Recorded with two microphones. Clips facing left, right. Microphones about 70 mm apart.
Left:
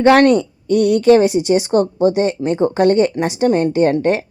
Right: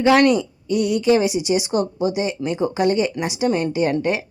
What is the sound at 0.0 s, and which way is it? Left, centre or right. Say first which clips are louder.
A woman's voice: left 4 dB; left.